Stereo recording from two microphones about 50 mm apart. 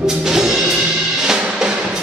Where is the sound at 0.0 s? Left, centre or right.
Centre.